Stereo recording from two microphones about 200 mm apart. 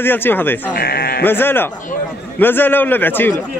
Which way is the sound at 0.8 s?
50° left (ahead or behind).